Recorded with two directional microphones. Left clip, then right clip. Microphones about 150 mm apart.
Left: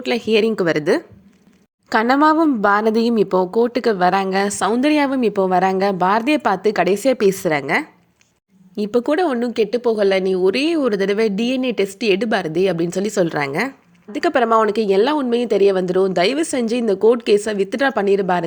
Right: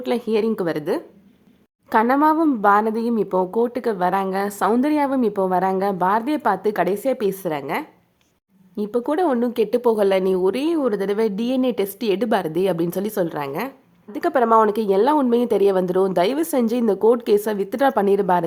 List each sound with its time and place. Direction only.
0.0 s speech: 5° left (ahead or behind)
13.2 s speech: 20° left (ahead or behind)
14.1 s speech: 5° left (ahead or behind)